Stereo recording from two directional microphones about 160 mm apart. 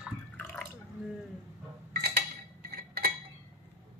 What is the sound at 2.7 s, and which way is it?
Chink, 75° right (ahead or behind).